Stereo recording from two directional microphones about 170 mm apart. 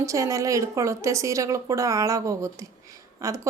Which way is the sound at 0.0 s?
20° right (ahead or behind).